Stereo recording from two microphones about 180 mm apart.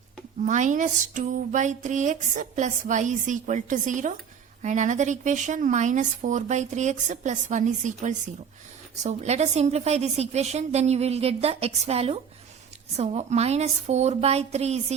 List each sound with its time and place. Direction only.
0.4 s a woman's voice: 45° right (ahead or behind)